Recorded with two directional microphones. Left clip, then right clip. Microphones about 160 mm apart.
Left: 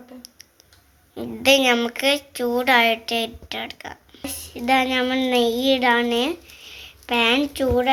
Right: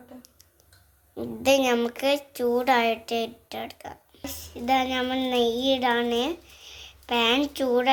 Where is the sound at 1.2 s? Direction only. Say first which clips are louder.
Left 5 dB; 5° right (ahead or behind).